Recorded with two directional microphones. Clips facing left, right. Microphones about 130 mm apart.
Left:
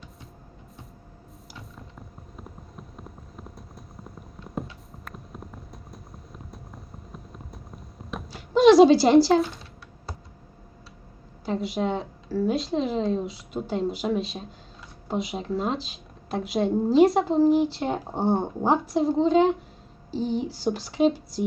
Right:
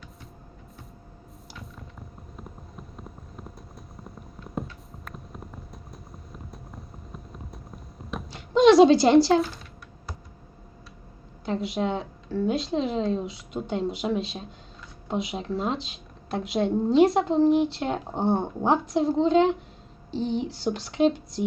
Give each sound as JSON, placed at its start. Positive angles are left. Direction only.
{"t": 1.7, "sound": "clip-clop", "side_deg": 0}
{"t": 11.4, "sound": "a woman's voice", "side_deg": 0}